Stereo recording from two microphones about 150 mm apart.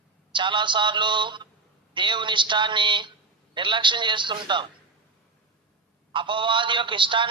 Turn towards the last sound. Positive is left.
turn(degrees=-35)  # may be behind; listen again after turning